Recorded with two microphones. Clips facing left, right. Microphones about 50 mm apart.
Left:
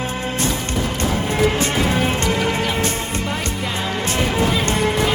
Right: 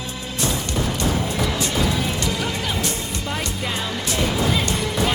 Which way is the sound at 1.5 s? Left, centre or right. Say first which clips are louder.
Left 4 dB; left.